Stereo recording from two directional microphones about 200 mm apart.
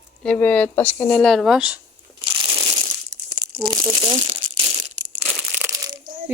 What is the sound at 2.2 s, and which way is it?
Crushing, 20° right (ahead or behind).